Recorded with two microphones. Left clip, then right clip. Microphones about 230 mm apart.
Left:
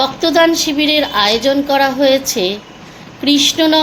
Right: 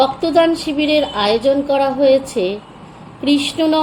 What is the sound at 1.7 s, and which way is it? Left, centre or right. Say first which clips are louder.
A woman's voice: left 2 dB; left.